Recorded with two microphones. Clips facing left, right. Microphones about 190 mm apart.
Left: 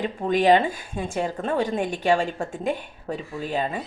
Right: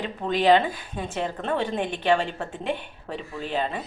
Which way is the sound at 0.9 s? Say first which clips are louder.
Left 2 dB; 10° left (ahead or behind).